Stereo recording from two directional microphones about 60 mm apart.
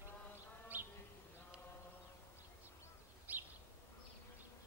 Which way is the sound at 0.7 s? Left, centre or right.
Right.